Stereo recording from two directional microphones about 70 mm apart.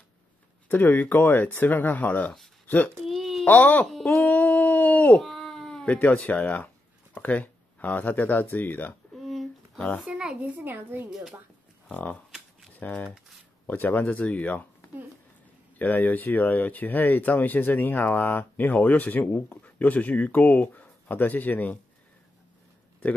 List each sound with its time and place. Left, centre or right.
0.7 s speech: left
3.1 s a sound: centre
3.4 s speech: left
3.8 s a sound: centre
4.3 s howl: left
5.2 s baby cry: centre
5.9 s speech: left
9.1 s a sound: centre
10.0 s a child's voice: centre
10.5 s a woman's voice: right
11.1 s speech: centre
11.9 s speech: left
15.8 s speech: left